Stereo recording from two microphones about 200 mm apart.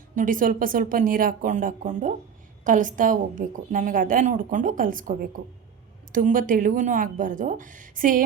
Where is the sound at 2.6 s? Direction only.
40° right (ahead or behind).